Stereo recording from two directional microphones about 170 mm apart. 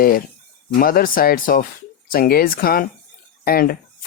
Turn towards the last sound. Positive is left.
turn(degrees=60)  # may be behind; listen again after turning